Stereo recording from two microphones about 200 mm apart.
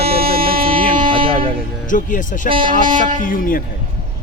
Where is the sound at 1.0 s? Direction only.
25° right (ahead or behind).